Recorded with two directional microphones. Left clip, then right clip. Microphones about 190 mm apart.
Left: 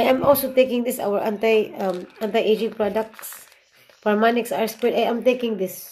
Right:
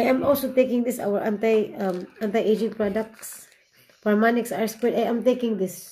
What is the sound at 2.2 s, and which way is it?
Speech, 15° right (ahead or behind).